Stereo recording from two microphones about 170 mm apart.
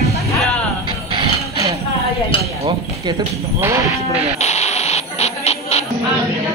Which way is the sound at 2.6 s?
30° right (ahead or behind).